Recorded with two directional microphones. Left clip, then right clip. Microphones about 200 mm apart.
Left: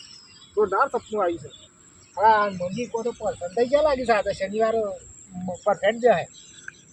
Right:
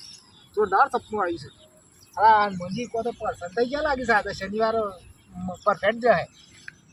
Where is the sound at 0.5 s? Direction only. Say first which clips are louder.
Right 1 dB; 5° right (ahead or behind).